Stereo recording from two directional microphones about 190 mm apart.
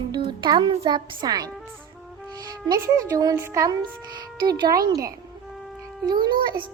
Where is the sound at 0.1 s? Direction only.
20° right (ahead or behind).